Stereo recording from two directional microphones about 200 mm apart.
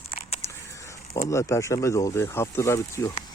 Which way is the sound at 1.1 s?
15° left (ahead or behind).